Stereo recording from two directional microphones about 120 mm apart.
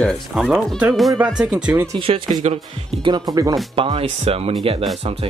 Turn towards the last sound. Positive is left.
turn(degrees=-55)  # may be behind; listen again after turning